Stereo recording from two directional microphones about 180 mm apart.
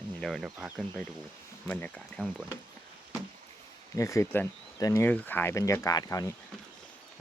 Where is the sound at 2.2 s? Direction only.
5° right (ahead or behind).